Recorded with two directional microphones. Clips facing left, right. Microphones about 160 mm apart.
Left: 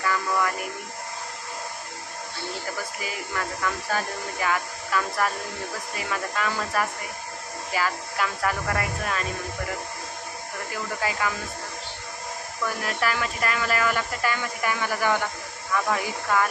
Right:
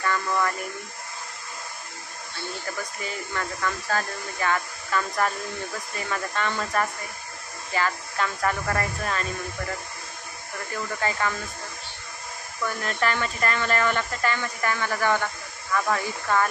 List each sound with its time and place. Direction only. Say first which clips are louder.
0.0 s speech: even; 5° left (ahead or behind)
2.8 s speech: even; 5° left (ahead or behind)
11.0 s speech: right 1 dB; 10° left (ahead or behind)
12.6 s speech: right 1 dB; 5° left (ahead or behind)